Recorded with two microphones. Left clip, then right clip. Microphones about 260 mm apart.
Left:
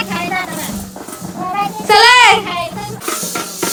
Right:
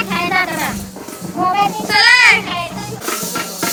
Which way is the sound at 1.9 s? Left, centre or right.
Centre.